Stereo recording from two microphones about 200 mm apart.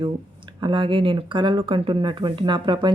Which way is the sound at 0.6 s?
25° right (ahead or behind).